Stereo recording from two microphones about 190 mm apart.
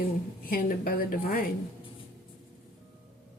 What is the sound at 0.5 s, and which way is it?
Speech, 50° left (ahead or behind).